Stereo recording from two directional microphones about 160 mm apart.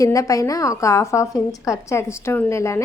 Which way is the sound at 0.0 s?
20° left (ahead or behind).